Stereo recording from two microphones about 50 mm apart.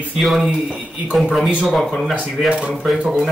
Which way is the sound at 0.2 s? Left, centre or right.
Centre.